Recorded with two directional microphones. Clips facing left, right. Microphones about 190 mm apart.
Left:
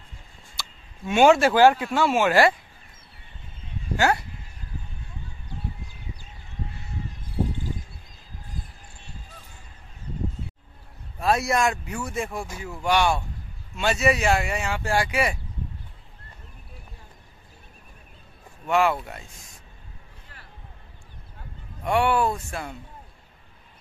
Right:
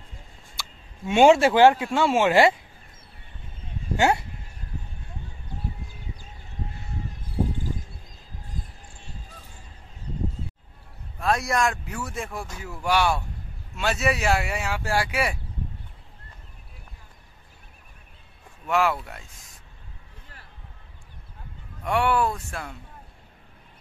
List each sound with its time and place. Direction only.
1.1 s speech: 25° right (ahead or behind)
3.9 s speech: 20° right (ahead or behind)
11.1 s speech: 5° left (ahead or behind)
18.7 s speech: centre (ahead or behind)
21.8 s speech: centre (ahead or behind)